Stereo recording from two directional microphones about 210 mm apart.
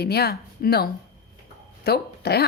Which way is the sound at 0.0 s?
50° left (ahead or behind).